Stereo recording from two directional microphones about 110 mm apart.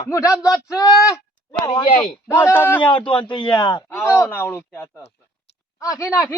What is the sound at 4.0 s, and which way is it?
Speech, 25° left (ahead or behind).